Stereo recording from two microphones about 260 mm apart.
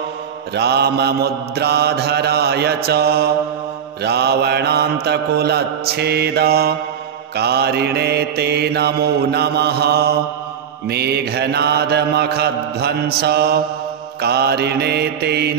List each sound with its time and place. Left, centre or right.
0.6 s mantra: right